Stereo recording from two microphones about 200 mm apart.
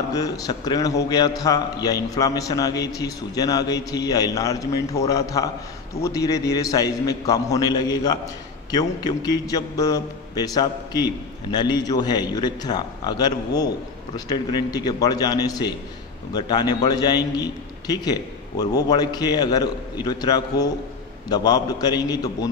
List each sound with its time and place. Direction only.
0.1 s a man's voice: 20° left (ahead or behind)